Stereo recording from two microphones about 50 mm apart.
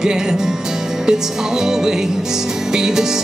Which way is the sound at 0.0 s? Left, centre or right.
Centre.